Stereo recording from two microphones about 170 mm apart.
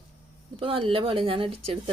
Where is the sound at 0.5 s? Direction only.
30° right (ahead or behind).